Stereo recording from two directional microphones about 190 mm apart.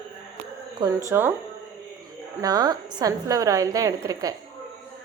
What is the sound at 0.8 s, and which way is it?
Speech, 15° right (ahead or behind).